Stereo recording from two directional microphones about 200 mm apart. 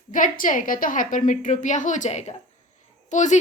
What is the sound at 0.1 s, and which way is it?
A woman's voice, 40° left (ahead or behind).